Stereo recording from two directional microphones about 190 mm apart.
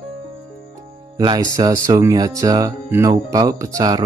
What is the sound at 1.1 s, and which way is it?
Speech, 20° right (ahead or behind).